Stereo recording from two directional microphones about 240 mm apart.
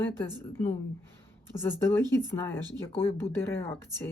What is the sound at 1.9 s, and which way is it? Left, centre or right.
Speech, centre.